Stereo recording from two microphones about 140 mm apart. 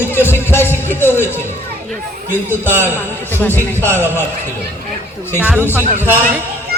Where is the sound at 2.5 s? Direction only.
15° right (ahead or behind).